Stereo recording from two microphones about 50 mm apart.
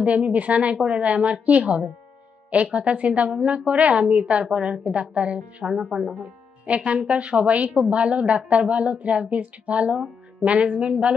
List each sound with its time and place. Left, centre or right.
0.0 s a woman's voice: right
6.6 s a woman's voice: right